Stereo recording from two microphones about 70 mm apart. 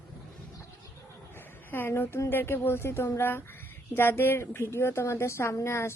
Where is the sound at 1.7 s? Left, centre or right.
Left.